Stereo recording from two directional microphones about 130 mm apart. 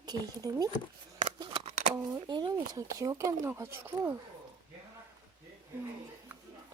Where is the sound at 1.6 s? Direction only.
65° right (ahead or behind).